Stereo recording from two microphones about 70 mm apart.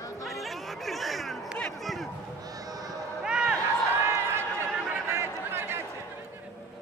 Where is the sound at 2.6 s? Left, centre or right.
Right.